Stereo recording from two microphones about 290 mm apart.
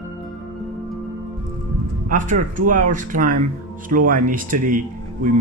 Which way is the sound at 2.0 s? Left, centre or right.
Right.